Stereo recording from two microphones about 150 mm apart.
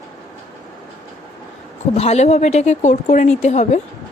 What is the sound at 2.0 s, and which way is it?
A woman's voice, 45° left (ahead or behind).